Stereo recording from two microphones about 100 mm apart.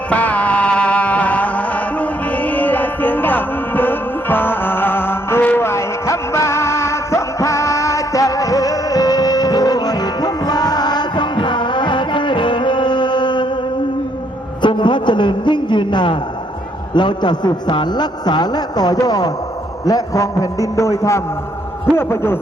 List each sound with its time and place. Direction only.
0.1 s music: 15° left (ahead or behind); by 13.5 s 50° left (ahead or behind)
14.6 s a sound: 50° left (ahead or behind)
16.9 s a man's voice: 50° left (ahead or behind); by 22.4 s 25° left (ahead or behind)